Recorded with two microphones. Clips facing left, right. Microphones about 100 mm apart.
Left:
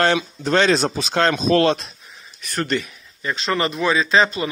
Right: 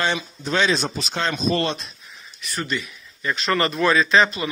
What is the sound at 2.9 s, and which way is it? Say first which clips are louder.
Speech: even; 25° left (ahead or behind).